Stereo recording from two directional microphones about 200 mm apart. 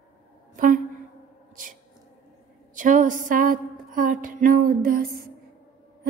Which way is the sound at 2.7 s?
40° right (ahead or behind).